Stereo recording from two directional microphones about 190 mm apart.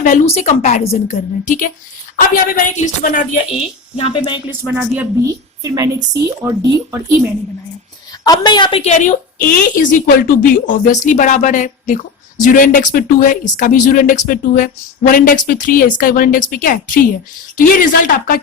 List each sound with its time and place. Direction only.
0.0 s a woman's voice: 40° left (ahead or behind)
3.9 s a woman's voice: 25° left (ahead or behind)
4.6 s a woman's voice: 10° right (ahead or behind)
8.2 s a woman's voice: 20° left (ahead or behind)
8.8 s a woman's voice: 40° left (ahead or behind)